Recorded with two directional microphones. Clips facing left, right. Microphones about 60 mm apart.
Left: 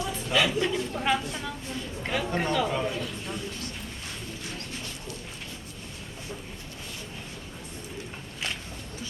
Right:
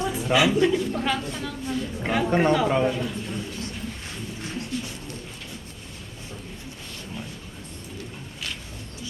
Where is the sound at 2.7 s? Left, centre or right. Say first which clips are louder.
Right 7 dB; right.